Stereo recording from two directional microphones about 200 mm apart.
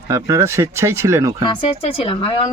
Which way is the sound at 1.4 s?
25° left (ahead or behind).